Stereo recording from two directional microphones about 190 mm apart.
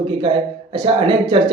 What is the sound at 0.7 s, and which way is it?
Speech, 25° right (ahead or behind).